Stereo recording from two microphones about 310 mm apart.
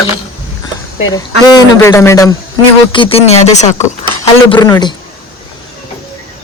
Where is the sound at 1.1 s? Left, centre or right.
Centre.